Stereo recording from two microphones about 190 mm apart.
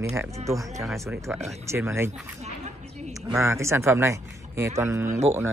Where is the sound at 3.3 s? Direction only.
15° right (ahead or behind).